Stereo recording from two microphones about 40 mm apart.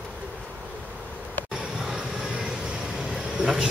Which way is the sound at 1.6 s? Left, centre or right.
Right.